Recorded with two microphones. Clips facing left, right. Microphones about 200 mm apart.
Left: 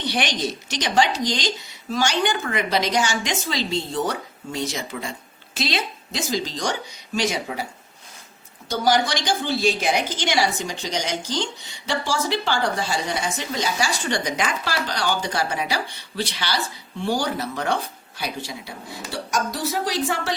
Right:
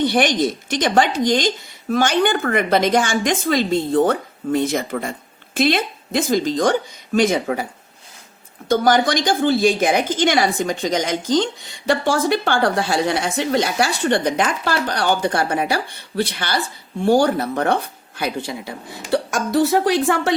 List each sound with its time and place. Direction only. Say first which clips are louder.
0.0 s speech: right 8 dB; 50° right (ahead or behind)
8.7 s speech: right 5 dB; 50° right (ahead or behind)